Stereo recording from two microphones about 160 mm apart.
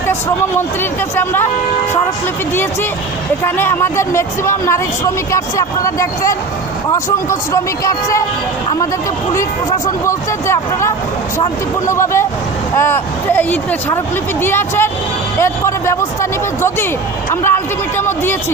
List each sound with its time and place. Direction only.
0.1 s speech: 15° left (ahead or behind)
3.4 s speech: 15° left (ahead or behind)
9.3 s speech: 20° left (ahead or behind)